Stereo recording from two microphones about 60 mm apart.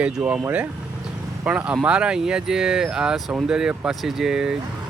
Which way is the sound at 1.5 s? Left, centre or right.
Right.